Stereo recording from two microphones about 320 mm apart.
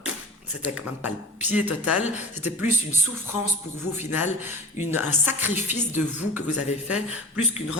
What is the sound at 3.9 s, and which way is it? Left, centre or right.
A woman's voice, centre.